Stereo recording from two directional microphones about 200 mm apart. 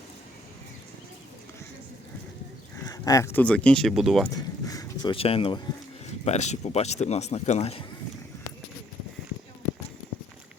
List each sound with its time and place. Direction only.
2.8 s speech: 15° left (ahead or behind); by 4.3 s centre (ahead or behind)
4.6 s a sound: 15° left (ahead or behind)
5.1 s speech: 30° left (ahead or behind)